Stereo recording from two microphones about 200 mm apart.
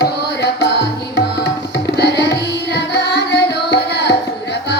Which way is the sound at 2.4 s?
55° left (ahead or behind).